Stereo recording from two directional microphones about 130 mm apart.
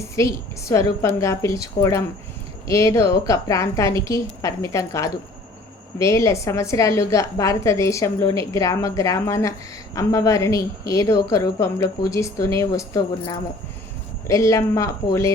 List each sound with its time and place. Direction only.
0.2 s a woman's voice: 25° left (ahead or behind)